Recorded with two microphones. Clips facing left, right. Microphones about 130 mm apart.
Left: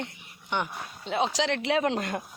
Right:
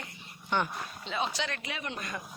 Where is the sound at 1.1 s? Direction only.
90° left.